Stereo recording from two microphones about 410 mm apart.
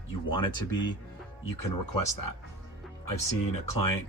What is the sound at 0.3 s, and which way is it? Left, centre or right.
Speech, left.